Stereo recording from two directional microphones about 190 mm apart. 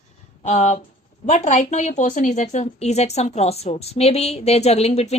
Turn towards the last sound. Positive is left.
turn(degrees=35)  # may be behind; listen again after turning